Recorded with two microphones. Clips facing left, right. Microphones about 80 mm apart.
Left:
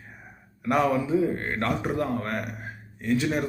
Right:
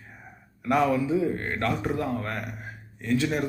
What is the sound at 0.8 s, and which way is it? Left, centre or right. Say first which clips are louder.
Speech: left 1 dB; left.